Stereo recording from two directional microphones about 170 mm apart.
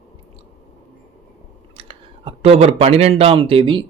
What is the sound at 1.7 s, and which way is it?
Speech, 35° right (ahead or behind).